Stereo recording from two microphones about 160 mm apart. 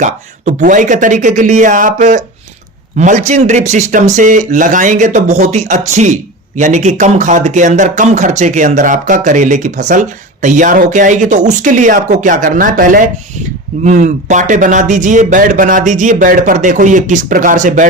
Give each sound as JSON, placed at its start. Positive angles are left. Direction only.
{"t": 0.0, "sound": "speech", "side_deg": -50}